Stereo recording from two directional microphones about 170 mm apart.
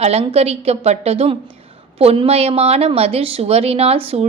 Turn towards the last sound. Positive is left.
turn(degrees=-35)  # may be behind; listen again after turning